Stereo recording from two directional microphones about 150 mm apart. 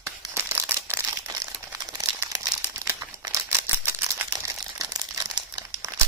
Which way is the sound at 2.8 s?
20° right (ahead or behind).